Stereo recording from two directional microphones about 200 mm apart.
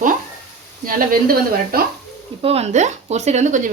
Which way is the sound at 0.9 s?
45° right (ahead or behind).